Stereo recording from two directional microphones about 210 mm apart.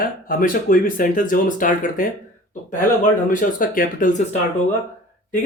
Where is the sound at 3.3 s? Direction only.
40° left (ahead or behind).